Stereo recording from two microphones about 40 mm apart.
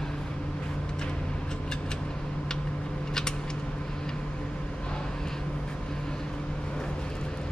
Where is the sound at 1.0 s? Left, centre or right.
Centre.